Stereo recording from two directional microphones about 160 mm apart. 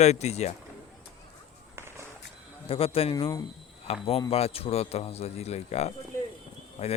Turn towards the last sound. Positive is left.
turn(degrees=40)  # may be behind; listen again after turning